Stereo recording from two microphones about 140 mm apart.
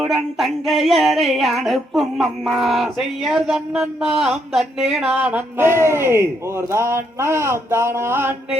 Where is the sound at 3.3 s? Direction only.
5° right (ahead or behind).